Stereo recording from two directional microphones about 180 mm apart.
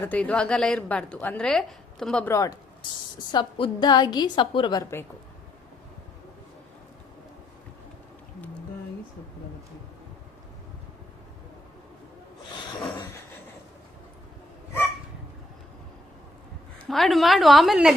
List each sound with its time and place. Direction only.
0.0 s a woman's voice: 10° left (ahead or behind)
2.3 s a woman's voice: 20° left (ahead or behind)
16.9 s a woman's voice: centre (ahead or behind)